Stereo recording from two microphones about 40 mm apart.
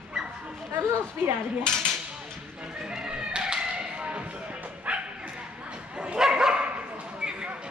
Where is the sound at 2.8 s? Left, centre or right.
Right.